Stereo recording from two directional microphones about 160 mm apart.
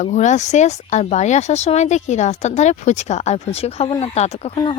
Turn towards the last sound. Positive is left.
turn(degrees=40)  # may be behind; listen again after turning